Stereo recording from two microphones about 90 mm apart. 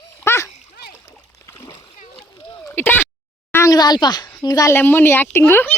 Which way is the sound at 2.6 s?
25° left (ahead or behind).